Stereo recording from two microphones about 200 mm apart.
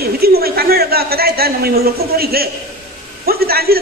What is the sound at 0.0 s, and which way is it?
A man's voice, 50° right (ahead or behind).